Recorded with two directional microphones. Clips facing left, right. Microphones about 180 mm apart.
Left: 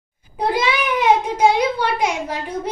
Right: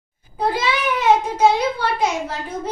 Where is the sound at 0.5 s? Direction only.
15° left (ahead or behind).